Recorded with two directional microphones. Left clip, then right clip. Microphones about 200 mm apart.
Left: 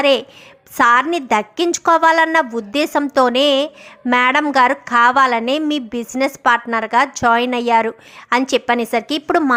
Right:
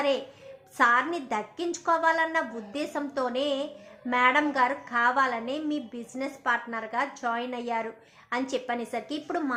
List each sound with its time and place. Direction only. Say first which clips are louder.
0.8 s a woman's voice: left 10 dB; 40° left (ahead or behind)